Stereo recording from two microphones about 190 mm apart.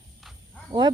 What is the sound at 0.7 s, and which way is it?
Speech, 25° right (ahead or behind).